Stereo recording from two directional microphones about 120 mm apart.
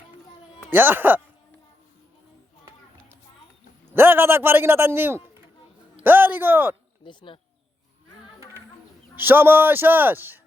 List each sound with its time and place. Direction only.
0.7 s a man's voice: 15° right (ahead or behind)
3.9 s a man's voice: 15° right (ahead or behind)
7.0 s speech: 40° left (ahead or behind)
9.1 s a man's voice: 15° right (ahead or behind)